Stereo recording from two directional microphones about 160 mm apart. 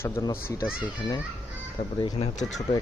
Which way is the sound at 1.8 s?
35° left (ahead or behind).